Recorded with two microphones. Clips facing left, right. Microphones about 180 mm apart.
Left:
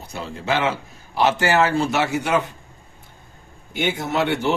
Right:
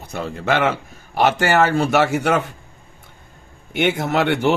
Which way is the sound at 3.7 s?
70° right (ahead or behind).